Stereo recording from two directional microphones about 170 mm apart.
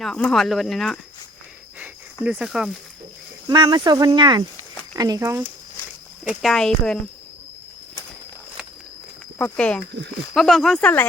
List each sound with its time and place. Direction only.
0.0 s speech: 5° left (ahead or behind)
2.2 s speech: 5° right (ahead or behind)
3.5 s speech: 25° right (ahead or behind)
6.2 s speech: centre (ahead or behind)
9.4 s speech: 5° left (ahead or behind)